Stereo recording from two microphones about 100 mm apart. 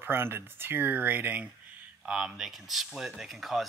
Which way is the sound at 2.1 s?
5° right (ahead or behind).